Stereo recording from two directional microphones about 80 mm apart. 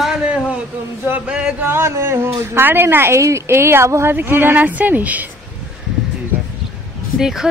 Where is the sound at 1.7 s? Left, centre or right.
Right; by 5.2 s centre.